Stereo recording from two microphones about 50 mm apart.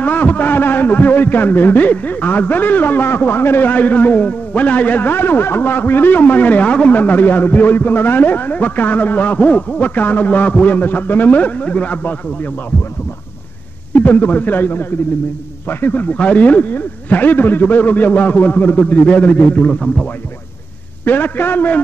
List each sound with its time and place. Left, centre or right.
0.0 s a man's voice: left
3.7 s a man's voice: left
7.0 s a man's voice: left
13.9 s a man's voice: left
16.1 s a man's voice: left
21.0 s a man's voice: left